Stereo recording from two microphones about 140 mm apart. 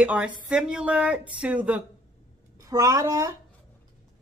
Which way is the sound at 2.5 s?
25° right (ahead or behind).